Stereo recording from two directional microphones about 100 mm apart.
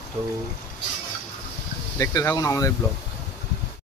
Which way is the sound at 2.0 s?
30° left (ahead or behind).